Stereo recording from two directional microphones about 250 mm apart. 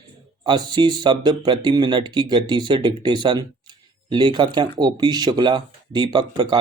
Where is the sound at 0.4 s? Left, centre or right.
Centre.